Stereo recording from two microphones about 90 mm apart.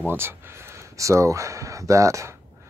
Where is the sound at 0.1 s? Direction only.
25° right (ahead or behind).